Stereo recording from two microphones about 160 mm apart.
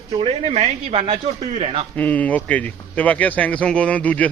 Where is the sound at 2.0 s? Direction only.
10° left (ahead or behind).